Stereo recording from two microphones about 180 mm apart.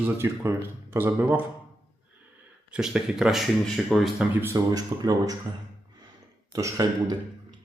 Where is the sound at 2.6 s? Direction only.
5° right (ahead or behind).